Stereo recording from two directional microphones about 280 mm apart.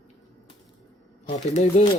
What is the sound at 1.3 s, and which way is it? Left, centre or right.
Speech, left.